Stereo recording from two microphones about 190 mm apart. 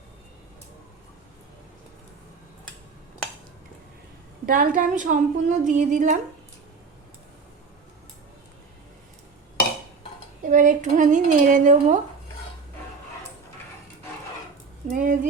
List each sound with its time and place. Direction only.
4.4 s a woman's voice: 50° right (ahead or behind)
10.4 s speech: 40° right (ahead or behind)
14.8 s a woman's voice: 45° right (ahead or behind)